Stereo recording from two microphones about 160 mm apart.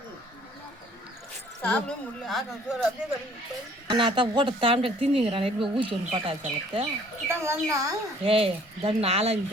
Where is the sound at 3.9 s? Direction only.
30° right (ahead or behind).